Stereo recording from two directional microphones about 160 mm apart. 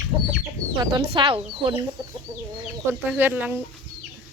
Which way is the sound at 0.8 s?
30° right (ahead or behind).